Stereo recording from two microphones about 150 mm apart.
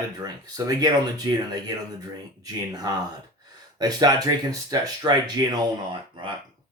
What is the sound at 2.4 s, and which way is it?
Speech, 25° right (ahead or behind).